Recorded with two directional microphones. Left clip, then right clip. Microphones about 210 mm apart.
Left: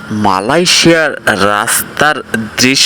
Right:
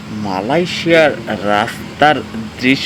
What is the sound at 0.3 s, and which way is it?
Speech, 50° left (ahead or behind).